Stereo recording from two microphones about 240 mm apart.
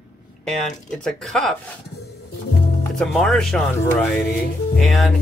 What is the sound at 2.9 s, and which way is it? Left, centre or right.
Speech, centre.